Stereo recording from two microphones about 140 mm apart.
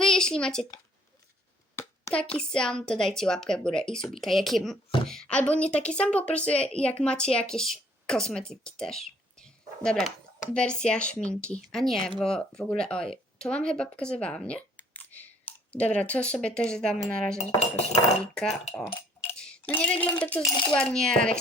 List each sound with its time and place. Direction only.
0.0 s a sound: 5° left (ahead or behind)
1.7 s a sound: 20° left (ahead or behind)
2.1 s a woman's voice: 5° left (ahead or behind)
17.3 s cutlery: 50° left (ahead or behind)
19.3 s speech: 10° left (ahead or behind)
20.4 s cutlery: 30° left (ahead or behind)
20.7 s a woman's voice: 5° left (ahead or behind)